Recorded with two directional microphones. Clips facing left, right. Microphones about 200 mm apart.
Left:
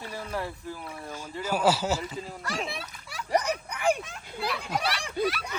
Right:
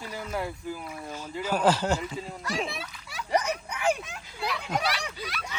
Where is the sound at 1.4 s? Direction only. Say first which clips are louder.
Right 1 dB; 10° left (ahead or behind).